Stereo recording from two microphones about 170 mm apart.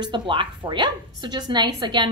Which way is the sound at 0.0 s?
30° right (ahead or behind).